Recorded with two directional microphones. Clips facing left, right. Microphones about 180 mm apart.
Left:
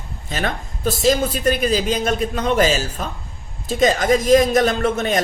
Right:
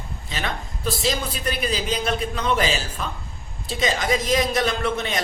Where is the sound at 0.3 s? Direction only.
45° left (ahead or behind).